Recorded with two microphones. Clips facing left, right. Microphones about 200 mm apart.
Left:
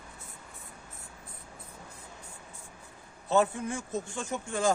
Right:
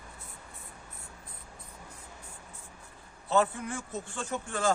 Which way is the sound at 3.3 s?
15° left (ahead or behind).